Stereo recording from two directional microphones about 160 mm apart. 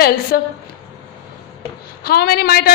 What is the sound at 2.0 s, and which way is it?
Speech, 75° left (ahead or behind).